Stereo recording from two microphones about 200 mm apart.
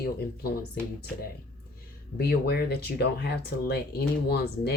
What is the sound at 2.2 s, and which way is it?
Speech, 55° left (ahead or behind).